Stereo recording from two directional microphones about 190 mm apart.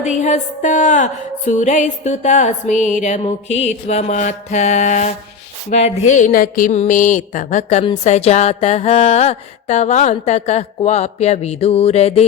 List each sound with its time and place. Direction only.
0.0 s speech: 40° left (ahead or behind)